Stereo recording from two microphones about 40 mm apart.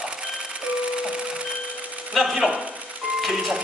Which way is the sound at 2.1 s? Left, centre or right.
Centre.